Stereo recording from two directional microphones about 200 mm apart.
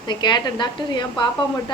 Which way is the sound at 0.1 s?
20° left (ahead or behind).